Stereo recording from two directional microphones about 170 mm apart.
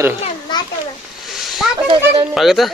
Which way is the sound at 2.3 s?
Centre (ahead or behind).